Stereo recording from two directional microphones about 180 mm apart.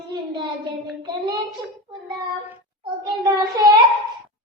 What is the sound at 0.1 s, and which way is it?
Child singing, 25° right (ahead or behind).